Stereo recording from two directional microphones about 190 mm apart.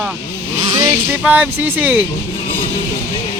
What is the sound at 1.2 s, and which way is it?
Speech, 10° right (ahead or behind).